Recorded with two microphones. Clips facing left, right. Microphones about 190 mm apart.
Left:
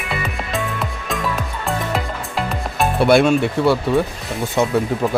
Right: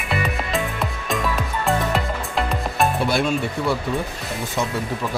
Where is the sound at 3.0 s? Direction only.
70° left (ahead or behind).